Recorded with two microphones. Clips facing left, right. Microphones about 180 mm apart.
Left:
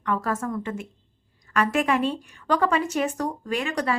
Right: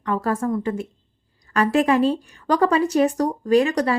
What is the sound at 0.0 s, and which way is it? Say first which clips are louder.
A woman's voice: right 4 dB; 30° right (ahead or behind).